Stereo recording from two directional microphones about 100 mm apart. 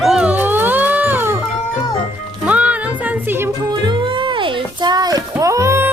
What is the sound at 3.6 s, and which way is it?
Music, 45° right (ahead or behind).